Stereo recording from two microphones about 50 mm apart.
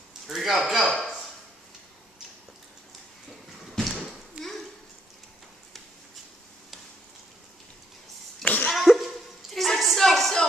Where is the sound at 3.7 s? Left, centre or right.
Centre.